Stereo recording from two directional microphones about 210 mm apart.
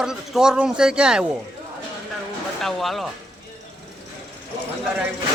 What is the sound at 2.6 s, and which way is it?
Speech, centre (ahead or behind).